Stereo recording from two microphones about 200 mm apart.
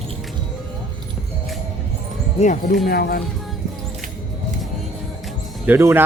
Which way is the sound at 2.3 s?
40° left (ahead or behind).